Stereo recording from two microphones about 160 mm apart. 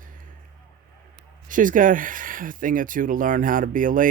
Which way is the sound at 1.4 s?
55° right (ahead or behind).